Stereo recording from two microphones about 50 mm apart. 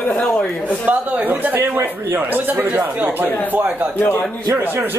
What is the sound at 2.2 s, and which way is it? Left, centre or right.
Speech, right.